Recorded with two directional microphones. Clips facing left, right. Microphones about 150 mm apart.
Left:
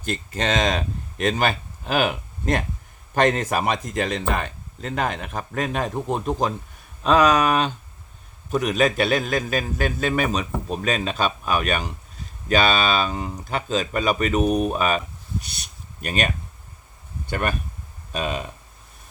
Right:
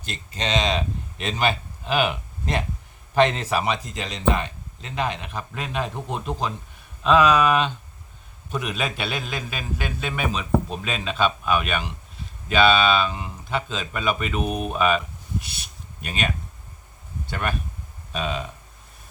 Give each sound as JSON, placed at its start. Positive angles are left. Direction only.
{"t": 0.0, "sound": "a man's voice", "side_deg": 50}